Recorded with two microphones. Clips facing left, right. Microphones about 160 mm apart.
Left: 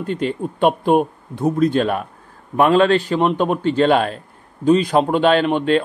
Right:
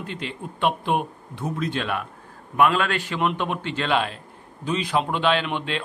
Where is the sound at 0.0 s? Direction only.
45° left (ahead or behind).